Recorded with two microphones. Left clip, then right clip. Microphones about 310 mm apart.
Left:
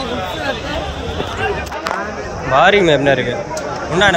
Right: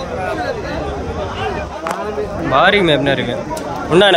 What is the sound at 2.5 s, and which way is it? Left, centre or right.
Speech, centre.